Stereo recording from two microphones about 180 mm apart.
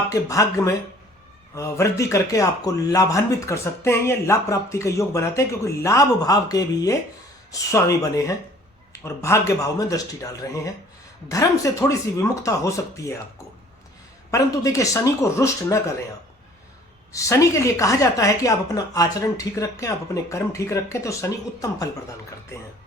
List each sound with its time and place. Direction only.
0.1 s speech: 20° left (ahead or behind)
14.3 s speech: 20° left (ahead or behind)
17.1 s speech: 15° left (ahead or behind)